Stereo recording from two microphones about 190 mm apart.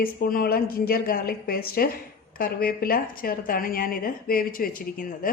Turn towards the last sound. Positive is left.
turn(degrees=45)  # may be behind; listen again after turning